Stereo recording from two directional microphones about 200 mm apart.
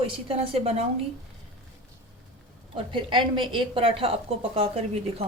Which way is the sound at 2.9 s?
25° right (ahead or behind).